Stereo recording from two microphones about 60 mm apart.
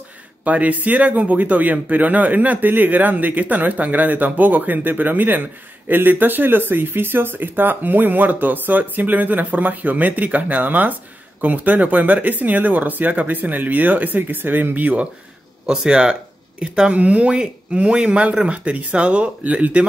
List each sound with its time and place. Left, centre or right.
0.4 s speech: right
15.6 s speech: centre